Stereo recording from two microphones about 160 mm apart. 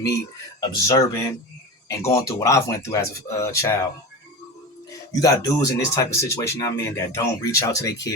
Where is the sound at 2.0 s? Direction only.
20° left (ahead or behind).